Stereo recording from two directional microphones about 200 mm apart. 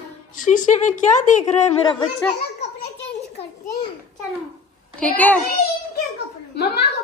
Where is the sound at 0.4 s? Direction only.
40° left (ahead or behind).